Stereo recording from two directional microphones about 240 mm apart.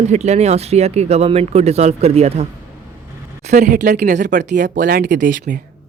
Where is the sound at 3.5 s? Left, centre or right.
Right.